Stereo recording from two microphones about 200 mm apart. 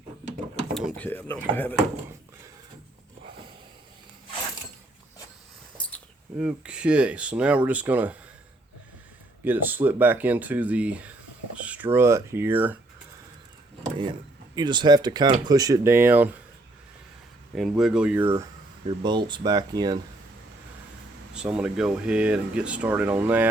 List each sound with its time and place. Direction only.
0.7 s speech: centre (ahead or behind)
6.3 s speech: 5° right (ahead or behind)
9.4 s speech: 10° right (ahead or behind)
14.5 s speech: 20° right (ahead or behind)
17.5 s speech: centre (ahead or behind)
18.9 s speech: 25° right (ahead or behind)
21.3 s speech: 5° right (ahead or behind)